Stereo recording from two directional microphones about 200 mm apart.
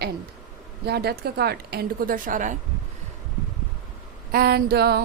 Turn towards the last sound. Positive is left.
turn(degrees=-50)  # may be behind; listen again after turning